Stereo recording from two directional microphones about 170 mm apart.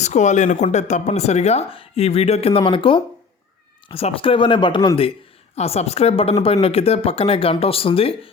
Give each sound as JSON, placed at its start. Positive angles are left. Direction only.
{"t": 0.0, "sound": "speech", "side_deg": 45}